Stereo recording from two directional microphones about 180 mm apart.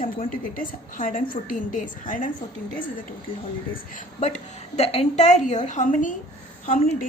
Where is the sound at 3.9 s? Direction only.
40° left (ahead or behind).